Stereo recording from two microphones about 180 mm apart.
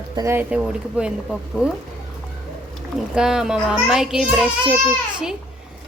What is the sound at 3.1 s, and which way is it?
A child's voice, 5° right (ahead or behind).